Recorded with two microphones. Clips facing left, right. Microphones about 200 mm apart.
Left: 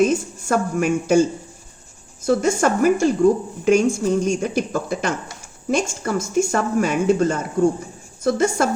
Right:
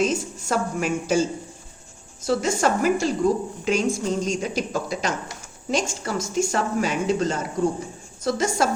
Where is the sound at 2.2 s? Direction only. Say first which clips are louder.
Left 4 dB; 50° left (ahead or behind).